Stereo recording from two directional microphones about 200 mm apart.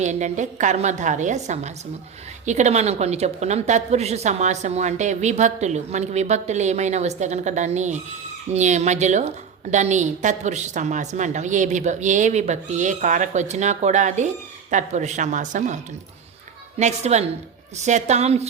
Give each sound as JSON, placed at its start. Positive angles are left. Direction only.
{"t": 0.0, "sound": "a woman's voice", "side_deg": -35}